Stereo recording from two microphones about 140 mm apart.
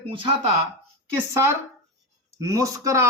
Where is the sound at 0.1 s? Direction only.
35° right (ahead or behind).